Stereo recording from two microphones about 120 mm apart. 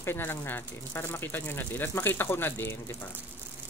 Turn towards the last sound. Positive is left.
turn(degrees=15)  # may be behind; listen again after turning